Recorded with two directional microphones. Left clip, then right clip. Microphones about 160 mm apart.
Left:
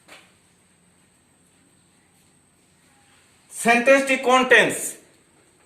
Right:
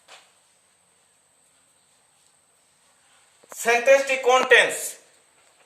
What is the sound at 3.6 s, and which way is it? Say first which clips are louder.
Speech: left 1 dB; 10° right (ahead or behind).